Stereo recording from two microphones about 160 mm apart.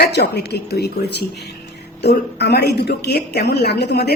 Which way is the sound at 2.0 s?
90° left.